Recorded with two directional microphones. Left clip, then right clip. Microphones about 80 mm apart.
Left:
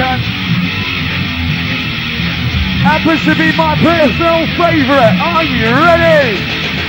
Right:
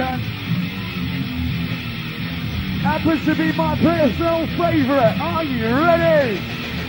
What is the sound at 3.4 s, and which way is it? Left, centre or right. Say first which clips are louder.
Speech: left 8 dB; right.